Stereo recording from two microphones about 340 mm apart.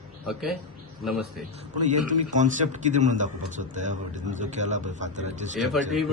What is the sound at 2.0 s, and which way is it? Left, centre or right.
Speech, right.